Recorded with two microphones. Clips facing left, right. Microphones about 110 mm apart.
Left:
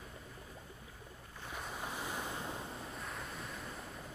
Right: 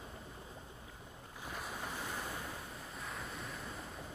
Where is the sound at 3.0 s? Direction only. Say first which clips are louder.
Even; centre (ahead or behind).